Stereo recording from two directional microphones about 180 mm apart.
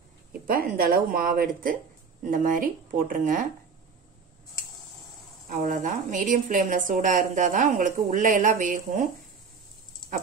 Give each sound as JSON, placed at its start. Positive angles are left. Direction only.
{"t": 0.5, "sound": "a woman's voice", "side_deg": -55}
{"t": 5.5, "sound": "a woman's voice", "side_deg": -45}